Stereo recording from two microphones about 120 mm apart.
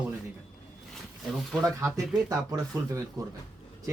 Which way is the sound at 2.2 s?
30° right (ahead or behind).